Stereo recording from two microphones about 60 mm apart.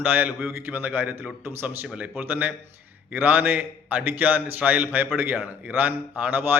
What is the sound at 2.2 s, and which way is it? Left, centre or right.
A man's voice, right.